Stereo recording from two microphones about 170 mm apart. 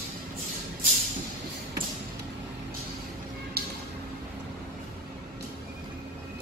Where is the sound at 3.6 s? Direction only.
65° right (ahead or behind).